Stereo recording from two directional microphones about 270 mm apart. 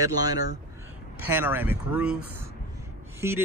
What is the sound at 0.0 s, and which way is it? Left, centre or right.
Speech, centre.